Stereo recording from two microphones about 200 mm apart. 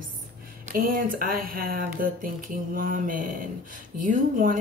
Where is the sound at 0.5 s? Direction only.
45° right (ahead or behind).